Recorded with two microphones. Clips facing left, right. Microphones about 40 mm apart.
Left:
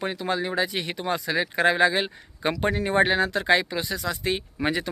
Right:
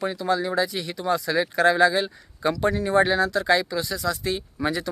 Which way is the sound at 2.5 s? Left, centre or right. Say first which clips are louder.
Right 2 dB; left.